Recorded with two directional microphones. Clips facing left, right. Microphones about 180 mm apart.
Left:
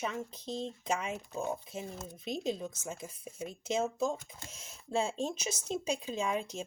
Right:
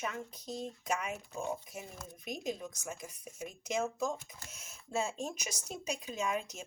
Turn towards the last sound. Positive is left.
turn(degrees=30)  # may be behind; listen again after turning